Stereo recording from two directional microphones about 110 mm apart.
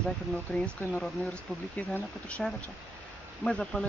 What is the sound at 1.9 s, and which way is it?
Speech, 10° left (ahead or behind).